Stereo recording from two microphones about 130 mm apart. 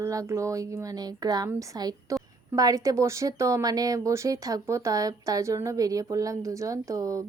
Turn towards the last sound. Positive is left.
turn(degrees=-25)  # may be behind; listen again after turning